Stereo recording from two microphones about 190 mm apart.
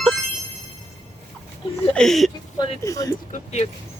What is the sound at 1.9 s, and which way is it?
Speech, 5° left (ahead or behind).